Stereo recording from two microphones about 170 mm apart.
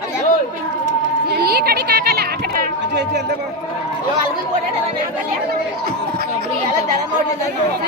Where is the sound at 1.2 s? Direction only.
70° right (ahead or behind).